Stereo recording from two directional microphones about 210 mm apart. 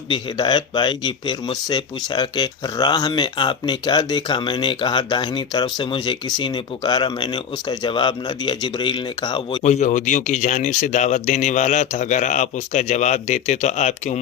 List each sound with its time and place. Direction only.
0.1 s speech: 20° left (ahead or behind)
9.6 s speech: 35° left (ahead or behind)